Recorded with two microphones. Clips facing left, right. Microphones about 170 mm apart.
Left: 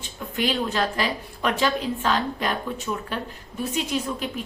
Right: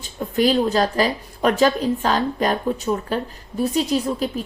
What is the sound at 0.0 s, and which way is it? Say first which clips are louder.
A woman's voice: right 8 dB; 40° right (ahead or behind).